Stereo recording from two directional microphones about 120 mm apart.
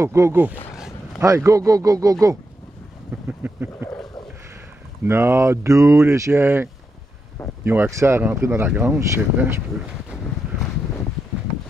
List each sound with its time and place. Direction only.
0.0 s speech: 25° right (ahead or behind)
1.2 s speech: 25° right (ahead or behind)
3.3 s speech: 15° right (ahead or behind)
5.0 s speech: 20° right (ahead or behind)